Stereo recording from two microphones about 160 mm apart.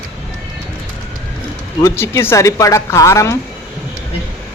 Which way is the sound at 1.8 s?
15° left (ahead or behind).